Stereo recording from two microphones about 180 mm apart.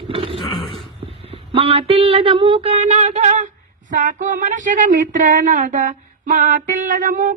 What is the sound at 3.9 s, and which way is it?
Speech, 45° right (ahead or behind).